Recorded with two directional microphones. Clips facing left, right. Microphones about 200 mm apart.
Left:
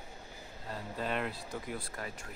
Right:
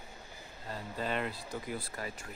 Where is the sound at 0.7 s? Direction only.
Centre (ahead or behind).